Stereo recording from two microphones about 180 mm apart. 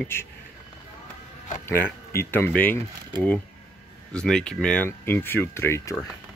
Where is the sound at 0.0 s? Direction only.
10° left (ahead or behind).